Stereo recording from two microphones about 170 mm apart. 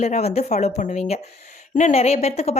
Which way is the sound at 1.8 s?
40° left (ahead or behind).